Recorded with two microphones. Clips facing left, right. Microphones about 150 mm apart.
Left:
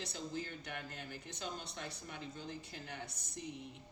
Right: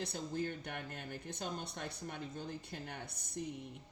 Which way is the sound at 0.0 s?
55° right (ahead or behind).